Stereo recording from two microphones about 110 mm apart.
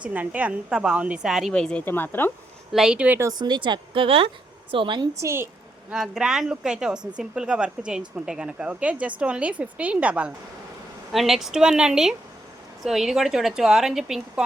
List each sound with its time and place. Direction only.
0.0 s a woman's voice: 15° right (ahead or behind); by 1.8 s 5° left (ahead or behind)
1.8 s speech: 20° left (ahead or behind)
2.7 s a woman's voice: 5° right (ahead or behind)
3.3 s speech: 40° right (ahead or behind)
5.2 s a woman's voice: 25° right (ahead or behind)
5.9 s a woman's voice: 5° right (ahead or behind)